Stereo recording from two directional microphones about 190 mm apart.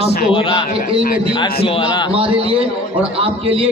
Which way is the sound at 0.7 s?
30° right (ahead or behind).